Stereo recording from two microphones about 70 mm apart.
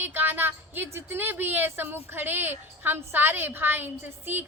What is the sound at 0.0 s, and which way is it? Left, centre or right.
A woman's voice, right.